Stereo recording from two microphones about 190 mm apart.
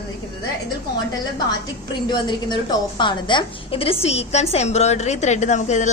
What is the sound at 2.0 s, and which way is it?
A woman's voice, 25° left (ahead or behind).